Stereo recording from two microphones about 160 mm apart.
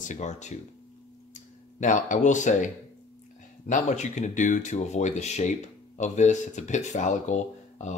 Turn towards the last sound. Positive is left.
turn(degrees=50)  # may be behind; listen again after turning